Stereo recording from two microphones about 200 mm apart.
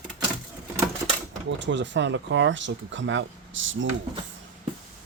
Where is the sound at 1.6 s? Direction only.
65° right (ahead or behind).